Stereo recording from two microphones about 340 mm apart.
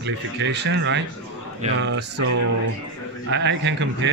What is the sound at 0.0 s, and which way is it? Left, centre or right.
Speech, right.